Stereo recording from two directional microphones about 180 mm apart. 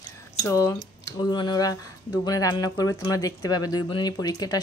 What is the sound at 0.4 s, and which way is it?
Speech, 20° left (ahead or behind).